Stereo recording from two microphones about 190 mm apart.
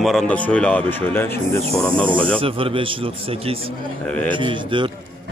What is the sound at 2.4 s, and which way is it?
A man's voice, 30° right (ahead or behind).